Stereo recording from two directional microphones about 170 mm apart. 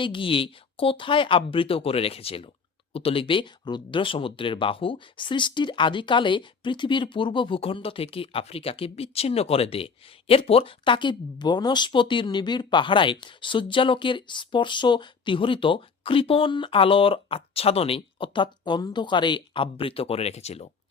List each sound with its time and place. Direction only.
0.0 s speech: 30° left (ahead or behind)